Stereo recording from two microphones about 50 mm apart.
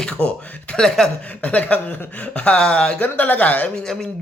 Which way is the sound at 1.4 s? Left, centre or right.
Left.